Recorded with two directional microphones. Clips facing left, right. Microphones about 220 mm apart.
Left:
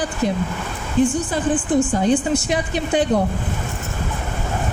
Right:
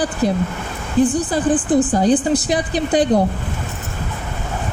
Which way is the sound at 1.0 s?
35° right (ahead or behind).